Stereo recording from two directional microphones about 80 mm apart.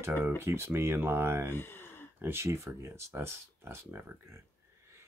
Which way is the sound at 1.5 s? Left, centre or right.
Left.